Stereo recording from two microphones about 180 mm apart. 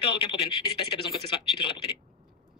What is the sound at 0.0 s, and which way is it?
Speech, 30° left (ahead or behind).